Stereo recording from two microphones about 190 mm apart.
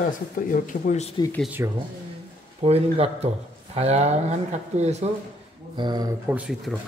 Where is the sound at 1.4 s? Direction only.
10° right (ahead or behind).